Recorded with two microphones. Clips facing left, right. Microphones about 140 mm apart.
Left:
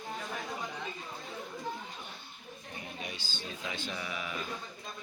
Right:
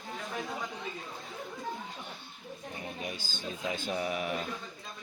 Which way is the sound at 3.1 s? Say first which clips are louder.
Right 3 dB; 45° right (ahead or behind).